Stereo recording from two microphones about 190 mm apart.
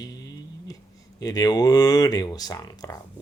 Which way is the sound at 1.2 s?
20° left (ahead or behind).